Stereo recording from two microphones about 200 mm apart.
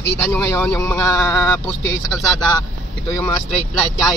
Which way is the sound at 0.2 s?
15° left (ahead or behind).